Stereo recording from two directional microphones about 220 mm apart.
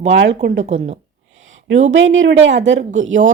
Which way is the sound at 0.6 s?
30° right (ahead or behind).